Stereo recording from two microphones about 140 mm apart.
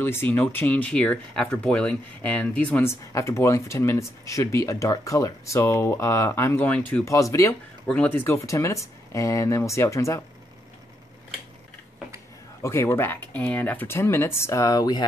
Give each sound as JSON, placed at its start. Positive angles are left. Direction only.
{"t": 0.0, "sound": "speech", "side_deg": 15}
{"t": 7.1, "sound": "speech", "side_deg": 20}
{"t": 7.8, "sound": "speech", "side_deg": 10}
{"t": 12.6, "sound": "speech", "side_deg": 20}